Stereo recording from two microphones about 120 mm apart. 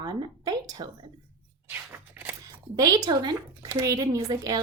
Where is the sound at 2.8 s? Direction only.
30° right (ahead or behind).